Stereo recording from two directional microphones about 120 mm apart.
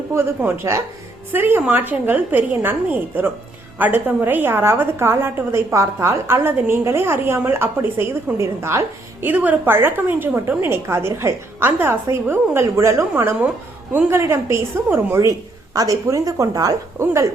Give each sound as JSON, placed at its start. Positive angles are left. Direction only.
{"t": 0.1, "sound": "a woman's voice", "side_deg": -20}